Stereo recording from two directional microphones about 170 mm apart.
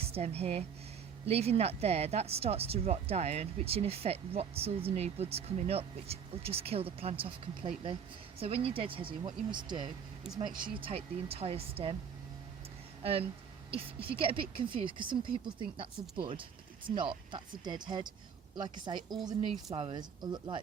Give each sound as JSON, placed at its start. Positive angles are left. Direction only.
{"t": 0.0, "sound": "speech", "side_deg": -35}
{"t": 10.8, "sound": "speech", "side_deg": -35}
{"t": 13.0, "sound": "speech", "side_deg": -35}